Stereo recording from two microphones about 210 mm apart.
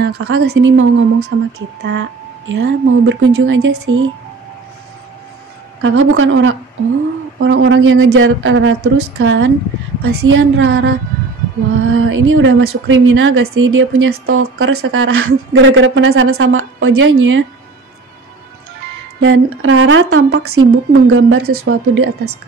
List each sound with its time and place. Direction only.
0.1 s speech: 90° right
0.5 s speech: 65° right (ahead or behind)
5.8 s a woman's voice: 70° right (ahead or behind)
19.2 s a woman's voice: 75° right (ahead or behind)
20.5 s a woman's voice: 85° right; by 22.3 s 65° right (ahead or behind)